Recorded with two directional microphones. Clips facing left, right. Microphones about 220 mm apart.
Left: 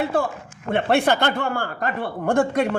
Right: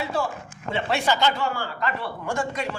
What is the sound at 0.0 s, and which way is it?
Speech, 55° left (ahead or behind).